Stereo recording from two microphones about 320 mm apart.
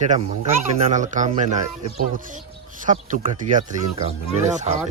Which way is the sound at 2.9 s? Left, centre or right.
Right.